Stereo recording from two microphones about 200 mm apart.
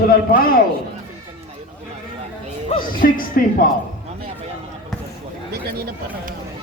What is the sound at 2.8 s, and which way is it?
Speech, 45° left (ahead or behind).